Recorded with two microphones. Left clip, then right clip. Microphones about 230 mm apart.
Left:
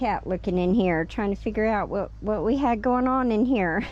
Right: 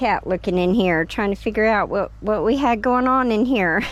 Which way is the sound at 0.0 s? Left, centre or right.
Centre.